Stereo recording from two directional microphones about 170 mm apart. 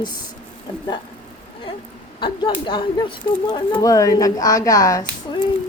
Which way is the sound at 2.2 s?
30° left (ahead or behind).